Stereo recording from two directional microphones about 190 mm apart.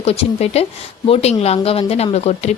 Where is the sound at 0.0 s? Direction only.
35° left (ahead or behind).